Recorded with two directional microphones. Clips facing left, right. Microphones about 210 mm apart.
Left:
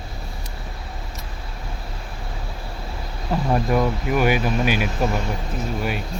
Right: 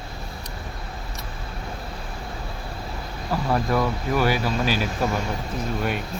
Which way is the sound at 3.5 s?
15° left (ahead or behind).